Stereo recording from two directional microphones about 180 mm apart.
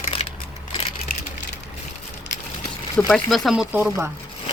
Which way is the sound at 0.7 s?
35° left (ahead or behind).